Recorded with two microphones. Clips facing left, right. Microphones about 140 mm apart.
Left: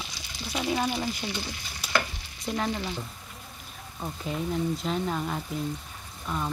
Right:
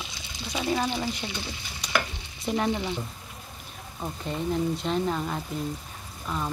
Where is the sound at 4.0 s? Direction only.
Centre (ahead or behind).